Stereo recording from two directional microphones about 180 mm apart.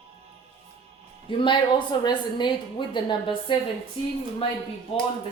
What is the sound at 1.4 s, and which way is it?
A woman's voice, 25° left (ahead or behind).